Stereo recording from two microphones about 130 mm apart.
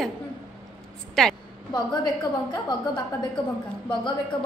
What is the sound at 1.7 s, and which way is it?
A woman's voice, 35° left (ahead or behind).